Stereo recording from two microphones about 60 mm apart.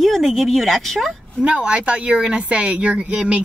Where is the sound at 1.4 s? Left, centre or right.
Centre.